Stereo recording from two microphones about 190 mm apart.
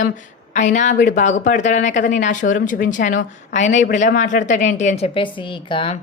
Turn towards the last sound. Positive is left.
turn(degrees=25)  # may be behind; listen again after turning